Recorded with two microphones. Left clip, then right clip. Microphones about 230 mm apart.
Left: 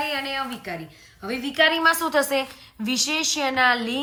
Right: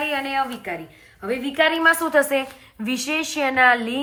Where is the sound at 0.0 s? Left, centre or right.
Centre.